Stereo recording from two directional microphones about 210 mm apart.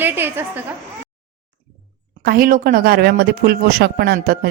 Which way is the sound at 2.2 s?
45° right (ahead or behind).